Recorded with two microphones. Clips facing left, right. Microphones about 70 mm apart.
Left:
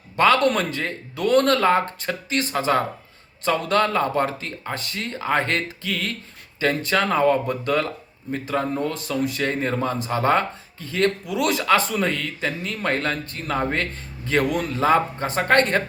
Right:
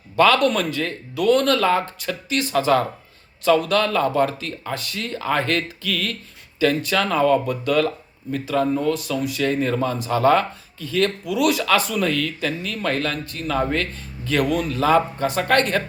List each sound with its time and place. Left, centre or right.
0.4 s speech: left